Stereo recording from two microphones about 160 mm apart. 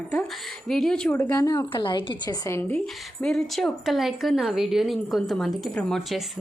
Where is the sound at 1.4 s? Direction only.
20° left (ahead or behind).